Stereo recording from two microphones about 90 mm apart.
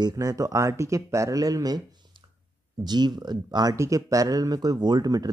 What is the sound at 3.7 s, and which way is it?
Speech, 35° right (ahead or behind).